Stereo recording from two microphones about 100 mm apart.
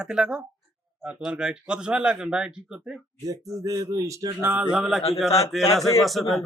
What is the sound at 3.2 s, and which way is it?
Speech, 35° right (ahead or behind).